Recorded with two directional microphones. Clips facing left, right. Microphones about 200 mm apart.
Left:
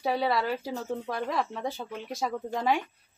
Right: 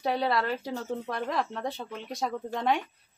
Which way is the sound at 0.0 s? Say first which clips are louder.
Even; centre (ahead or behind).